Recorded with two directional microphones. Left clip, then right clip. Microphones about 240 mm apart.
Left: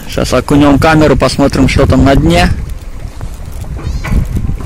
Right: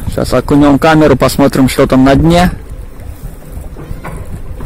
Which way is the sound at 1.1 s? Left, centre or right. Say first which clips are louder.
Right 1 dB; centre.